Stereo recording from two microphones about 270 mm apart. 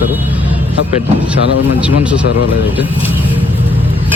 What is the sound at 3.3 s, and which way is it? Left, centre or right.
Vehicle, centre.